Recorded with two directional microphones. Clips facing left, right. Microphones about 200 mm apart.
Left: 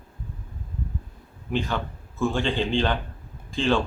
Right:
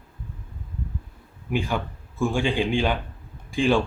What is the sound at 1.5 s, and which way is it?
Speech, 10° right (ahead or behind).